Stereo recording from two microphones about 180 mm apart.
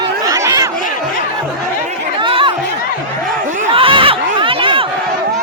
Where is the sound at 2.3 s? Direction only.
30° right (ahead or behind).